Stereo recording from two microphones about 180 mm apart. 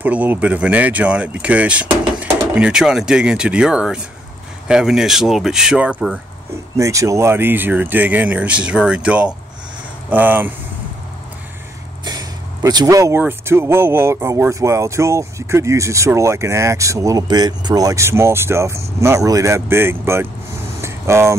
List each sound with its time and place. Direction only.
0.0 s speech: 10° right (ahead or behind)
6.8 s speech: 15° right (ahead or behind)
12.0 s speech: 20° right (ahead or behind)
20.8 s vehicle: 15° right (ahead or behind)